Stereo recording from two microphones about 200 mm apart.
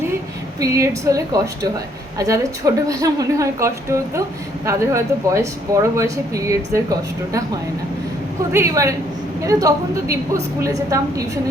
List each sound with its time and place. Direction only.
0.6 s speech: 15° right (ahead or behind)
8.5 s speech: 15° right (ahead or behind)